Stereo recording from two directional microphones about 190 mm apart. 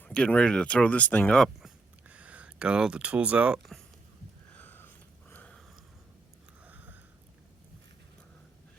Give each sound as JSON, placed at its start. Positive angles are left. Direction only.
{"t": 0.0, "sound": "speech", "side_deg": 5}
{"t": 4.5, "sound": "a sound", "side_deg": 10}
{"t": 5.3, "sound": "sniff", "side_deg": 5}
{"t": 6.7, "sound": "sniff", "side_deg": -10}